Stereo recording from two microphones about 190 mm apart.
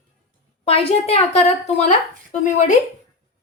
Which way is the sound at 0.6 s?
30° left (ahead or behind).